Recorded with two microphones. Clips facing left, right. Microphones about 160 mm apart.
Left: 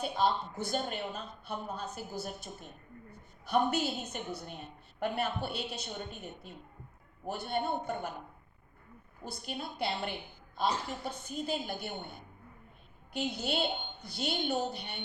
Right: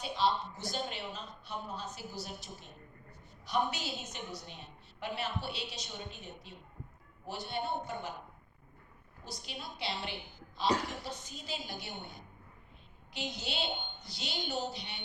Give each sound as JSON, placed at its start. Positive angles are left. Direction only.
{"t": 0.0, "sound": "a woman's voice", "side_deg": 55}
{"t": 9.2, "sound": "a woman's voice", "side_deg": 55}